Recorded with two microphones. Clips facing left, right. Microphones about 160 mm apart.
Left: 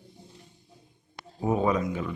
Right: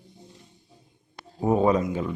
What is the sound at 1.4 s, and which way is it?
Speech, 35° right (ahead or behind).